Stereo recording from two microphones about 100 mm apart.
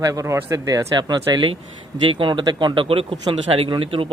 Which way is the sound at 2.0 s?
55° right (ahead or behind).